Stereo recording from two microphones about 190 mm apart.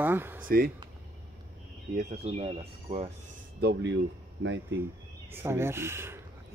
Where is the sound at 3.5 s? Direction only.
60° right (ahead or behind).